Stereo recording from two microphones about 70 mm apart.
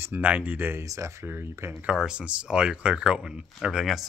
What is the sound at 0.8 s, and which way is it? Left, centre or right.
Speech, right.